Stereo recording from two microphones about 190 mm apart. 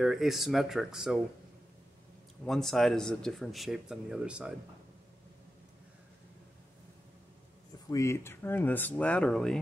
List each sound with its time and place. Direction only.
0.0 s speech: centre (ahead or behind)
2.4 s speech: centre (ahead or behind)
7.9 s speech: 15° left (ahead or behind)